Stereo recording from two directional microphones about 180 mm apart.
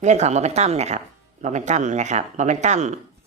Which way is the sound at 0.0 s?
40° right (ahead or behind).